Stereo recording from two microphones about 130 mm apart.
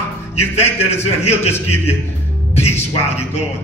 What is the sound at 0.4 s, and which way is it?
Speech, 55° left (ahead or behind).